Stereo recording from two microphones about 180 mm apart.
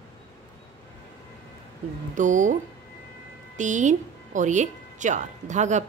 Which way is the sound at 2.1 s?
45° right (ahead or behind).